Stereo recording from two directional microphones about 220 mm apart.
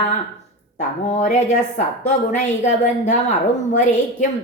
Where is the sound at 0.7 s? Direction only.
30° left (ahead or behind).